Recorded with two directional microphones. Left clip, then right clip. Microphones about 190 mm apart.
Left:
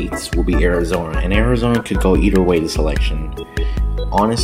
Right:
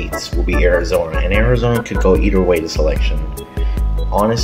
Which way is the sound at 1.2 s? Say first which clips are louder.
Right 2 dB; 40° left (ahead or behind).